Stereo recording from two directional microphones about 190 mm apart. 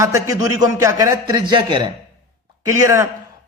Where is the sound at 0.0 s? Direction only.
15° right (ahead or behind).